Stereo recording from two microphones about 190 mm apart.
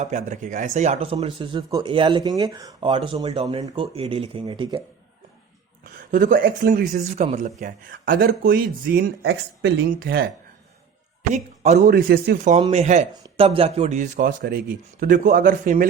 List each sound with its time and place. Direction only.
0.0 s speech: 40° right (ahead or behind)
5.8 s speech: 45° right (ahead or behind); by 9.8 s 65° right (ahead or behind)
9.9 s speech: 50° right (ahead or behind)
11.9 s speech: 50° right (ahead or behind)
12.7 s speech: 35° right (ahead or behind)